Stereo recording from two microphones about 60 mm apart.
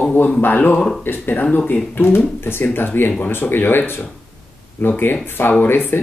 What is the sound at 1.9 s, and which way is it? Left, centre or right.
Speech, left.